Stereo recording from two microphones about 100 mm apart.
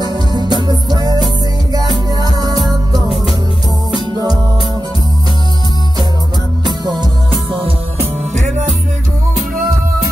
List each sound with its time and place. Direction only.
0.0 s music: 45° right (ahead or behind)
6.6 s music: 45° right (ahead or behind)